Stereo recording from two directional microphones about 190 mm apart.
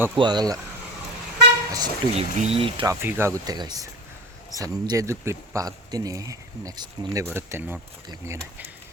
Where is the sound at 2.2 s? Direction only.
35° right (ahead or behind).